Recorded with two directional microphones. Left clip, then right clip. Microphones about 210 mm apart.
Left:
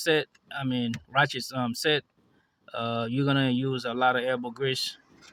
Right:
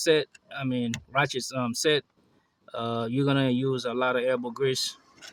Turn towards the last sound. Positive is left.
turn(degrees=5)  # may be behind; listen again after turning